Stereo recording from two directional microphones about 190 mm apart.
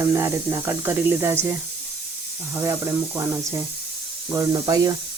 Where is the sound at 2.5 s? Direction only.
15° right (ahead or behind).